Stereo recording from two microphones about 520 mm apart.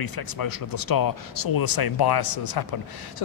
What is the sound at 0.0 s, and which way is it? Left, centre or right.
A man's voice, left.